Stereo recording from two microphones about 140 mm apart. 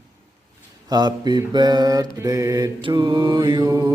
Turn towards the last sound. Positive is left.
turn(degrees=-30)  # may be behind; listen again after turning